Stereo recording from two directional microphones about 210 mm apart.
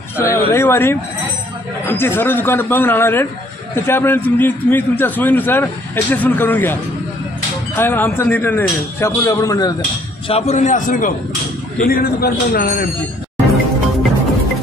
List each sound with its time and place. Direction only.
0.2 s a sound: 10° left (ahead or behind)
1.9 s a man's voice: 10° left (ahead or behind)
10.2 s a man's voice: 30° left (ahead or behind)